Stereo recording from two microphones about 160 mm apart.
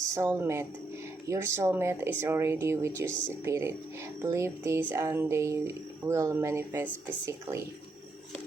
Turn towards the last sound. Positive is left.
turn(degrees=-15)  # may be behind; listen again after turning